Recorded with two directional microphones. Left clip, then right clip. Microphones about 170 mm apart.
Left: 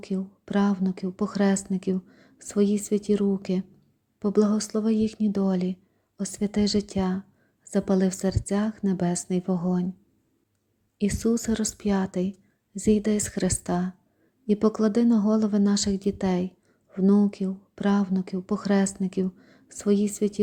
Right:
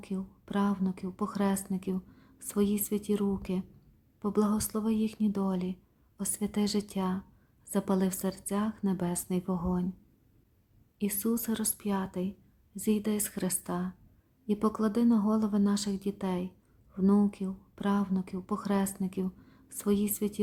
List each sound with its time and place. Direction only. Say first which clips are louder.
0.0 s a woman's voice: left 7 dB; 20° left (ahead or behind)
10.9 s a woman's voice: left 7 dB; 20° left (ahead or behind)